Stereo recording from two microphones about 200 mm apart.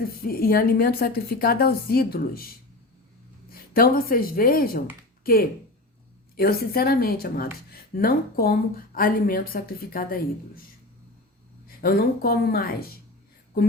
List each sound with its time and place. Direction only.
0.0 s speech: 50° left (ahead or behind)
3.5 s speech: 45° left (ahead or behind)
11.8 s speech: 50° left (ahead or behind)